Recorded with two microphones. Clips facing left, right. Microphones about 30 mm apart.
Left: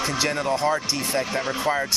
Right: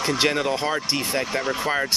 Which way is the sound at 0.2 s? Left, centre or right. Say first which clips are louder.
Right 5 dB; right.